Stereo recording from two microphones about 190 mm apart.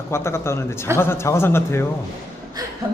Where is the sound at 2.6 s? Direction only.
20° right (ahead or behind).